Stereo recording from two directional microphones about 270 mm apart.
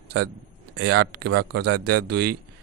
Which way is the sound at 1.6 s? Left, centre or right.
Right.